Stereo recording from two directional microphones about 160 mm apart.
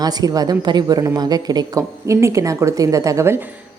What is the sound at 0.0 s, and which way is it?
A woman's voice, 25° right (ahead or behind).